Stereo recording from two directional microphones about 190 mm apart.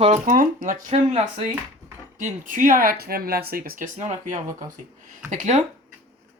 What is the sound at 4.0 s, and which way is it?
Speech, 35° right (ahead or behind).